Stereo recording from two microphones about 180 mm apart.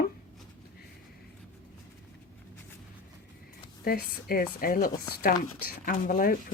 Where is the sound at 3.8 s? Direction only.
55° left (ahead or behind).